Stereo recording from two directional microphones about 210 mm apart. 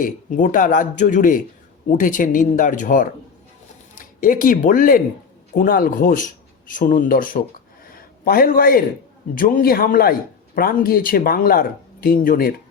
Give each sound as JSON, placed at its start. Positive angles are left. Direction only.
{"t": 0.0, "sound": "a man's voice", "side_deg": 40}